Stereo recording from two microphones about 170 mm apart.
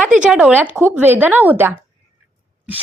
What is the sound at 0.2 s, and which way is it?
Speech, 5° right (ahead or behind).